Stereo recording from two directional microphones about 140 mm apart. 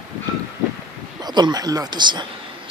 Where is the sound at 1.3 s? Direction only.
30° right (ahead or behind).